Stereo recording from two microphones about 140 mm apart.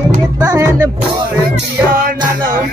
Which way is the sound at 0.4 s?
25° right (ahead or behind).